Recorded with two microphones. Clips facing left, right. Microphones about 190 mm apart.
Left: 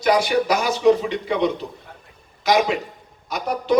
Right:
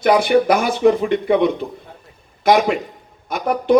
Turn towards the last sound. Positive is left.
turn(degrees=-55)  # may be behind; listen again after turning